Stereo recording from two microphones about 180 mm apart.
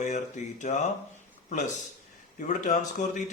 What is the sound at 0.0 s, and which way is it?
A man's voice, 40° left (ahead or behind).